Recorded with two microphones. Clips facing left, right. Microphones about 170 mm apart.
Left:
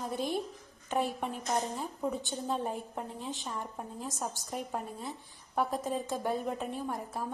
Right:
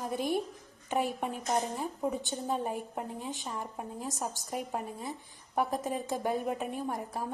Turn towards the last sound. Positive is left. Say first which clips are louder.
# right 1 dB
turn(degrees=-15)  # may be behind; listen again after turning